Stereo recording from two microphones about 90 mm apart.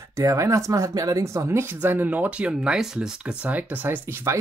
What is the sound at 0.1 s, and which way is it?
Speech, 35° right (ahead or behind).